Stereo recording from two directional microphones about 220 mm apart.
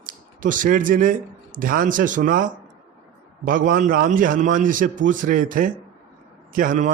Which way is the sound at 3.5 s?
40° right (ahead or behind).